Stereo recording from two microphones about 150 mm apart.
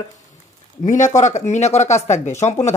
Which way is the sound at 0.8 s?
55° left (ahead or behind).